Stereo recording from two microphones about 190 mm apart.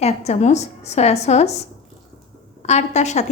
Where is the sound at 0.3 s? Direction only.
35° left (ahead or behind).